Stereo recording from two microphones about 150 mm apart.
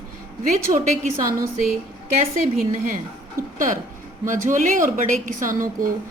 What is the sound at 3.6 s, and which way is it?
A woman's voice, 60° right (ahead or behind).